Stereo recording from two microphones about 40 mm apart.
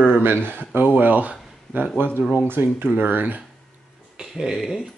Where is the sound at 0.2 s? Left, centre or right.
Right.